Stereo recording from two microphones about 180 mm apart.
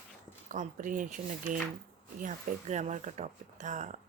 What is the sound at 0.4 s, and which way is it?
Speech, 45° right (ahead or behind).